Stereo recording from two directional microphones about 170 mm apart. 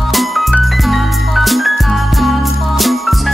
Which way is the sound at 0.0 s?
Centre (ahead or behind).